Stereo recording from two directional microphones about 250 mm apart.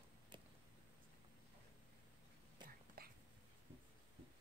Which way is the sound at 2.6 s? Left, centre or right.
Right.